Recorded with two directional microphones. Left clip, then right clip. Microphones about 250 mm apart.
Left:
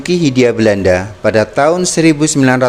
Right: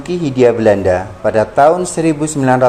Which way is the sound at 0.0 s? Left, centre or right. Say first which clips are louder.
Even; left.